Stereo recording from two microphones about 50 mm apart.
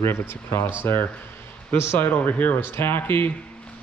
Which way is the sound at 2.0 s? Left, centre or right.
Left.